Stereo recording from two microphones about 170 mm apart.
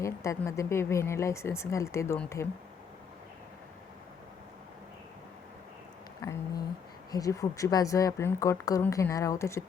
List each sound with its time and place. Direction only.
0.0 s speech: 15° left (ahead or behind)
6.2 s a sound: 20° left (ahead or behind)
7.1 s a woman's voice: 20° left (ahead or behind)